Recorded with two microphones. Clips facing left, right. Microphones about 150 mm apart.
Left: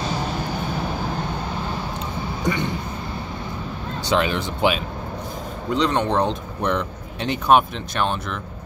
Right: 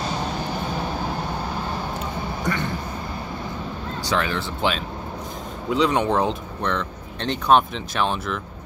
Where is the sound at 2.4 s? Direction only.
15° left (ahead or behind).